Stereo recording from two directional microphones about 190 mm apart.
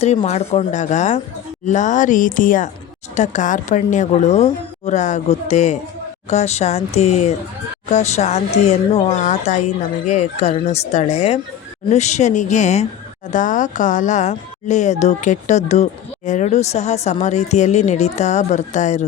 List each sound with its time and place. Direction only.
0.3 s speech: 35° left (ahead or behind)